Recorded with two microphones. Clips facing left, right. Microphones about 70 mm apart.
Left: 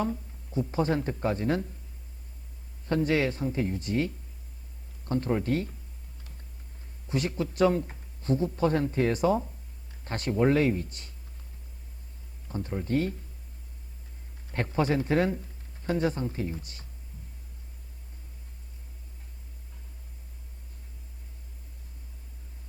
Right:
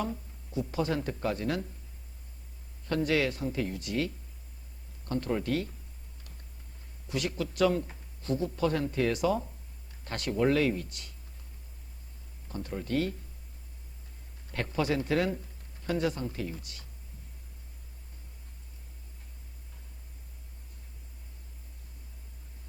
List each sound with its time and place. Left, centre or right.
0.0 s a sound: left
0.7 s speech: left
2.8 s speech: left
7.1 s speech: left
12.5 s speech: left
14.5 s speech: left